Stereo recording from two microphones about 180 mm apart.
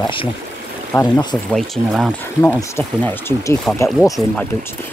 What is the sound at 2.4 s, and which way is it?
Speech, 10° left (ahead or behind).